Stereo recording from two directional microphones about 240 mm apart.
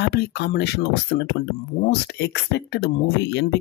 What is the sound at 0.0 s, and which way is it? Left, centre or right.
Speech, left.